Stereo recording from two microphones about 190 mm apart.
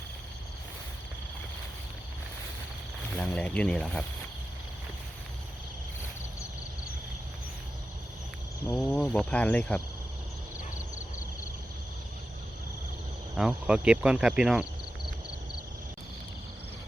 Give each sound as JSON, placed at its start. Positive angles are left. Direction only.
{"t": 3.2, "sound": "speech", "side_deg": 5}
{"t": 8.6, "sound": "speech", "side_deg": 15}
{"t": 13.3, "sound": "speech", "side_deg": -5}